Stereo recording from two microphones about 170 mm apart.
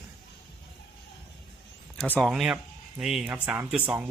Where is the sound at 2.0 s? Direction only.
Centre (ahead or behind).